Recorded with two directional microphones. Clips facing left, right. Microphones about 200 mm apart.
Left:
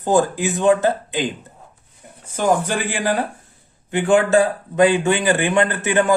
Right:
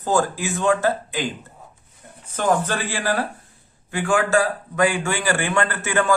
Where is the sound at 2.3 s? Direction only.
10° left (ahead or behind).